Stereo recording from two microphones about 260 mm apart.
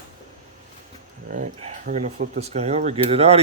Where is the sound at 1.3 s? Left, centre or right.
Right.